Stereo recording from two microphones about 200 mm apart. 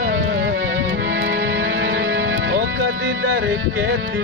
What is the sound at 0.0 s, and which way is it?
Music, 65° right (ahead or behind).